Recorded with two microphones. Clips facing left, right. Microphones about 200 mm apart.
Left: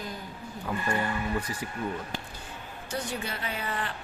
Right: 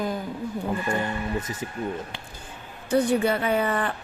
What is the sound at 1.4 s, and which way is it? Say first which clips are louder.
Speech: right 3 dB; 25° right (ahead or behind).